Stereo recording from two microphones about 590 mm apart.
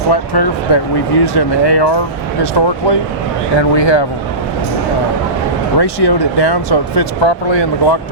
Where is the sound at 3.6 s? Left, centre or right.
Left.